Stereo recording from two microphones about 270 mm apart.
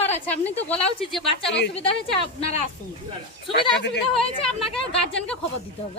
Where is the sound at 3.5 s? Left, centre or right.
Left.